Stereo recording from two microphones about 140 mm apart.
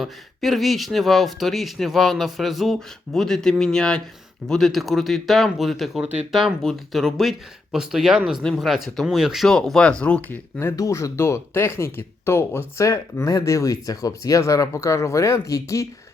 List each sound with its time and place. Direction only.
0.0 s speech: centre (ahead or behind); by 15.9 s 25° left (ahead or behind)